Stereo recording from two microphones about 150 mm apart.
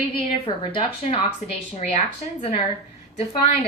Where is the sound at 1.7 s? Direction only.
45° left (ahead or behind).